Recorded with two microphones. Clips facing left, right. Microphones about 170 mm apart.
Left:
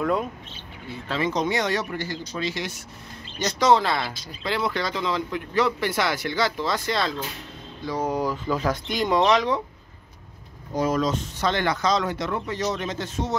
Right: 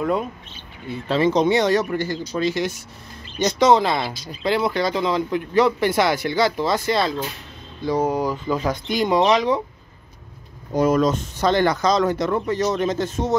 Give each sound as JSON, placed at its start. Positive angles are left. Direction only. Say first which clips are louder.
{"t": 0.0, "sound": "speech", "louder": "right 2 dB", "side_deg": 0}
{"t": 0.8, "sound": "speech", "louder": "right 7 dB", "side_deg": -30}
{"t": 1.7, "sound": "speech", "louder": "right 7 dB", "side_deg": -50}
{"t": 3.4, "sound": "speech", "louder": "right 4 dB", "side_deg": -20}
{"t": 8.1, "sound": "speech", "louder": "right 3 dB", "side_deg": 0}
{"t": 10.7, "sound": "speech", "louder": "right 5 dB", "side_deg": -55}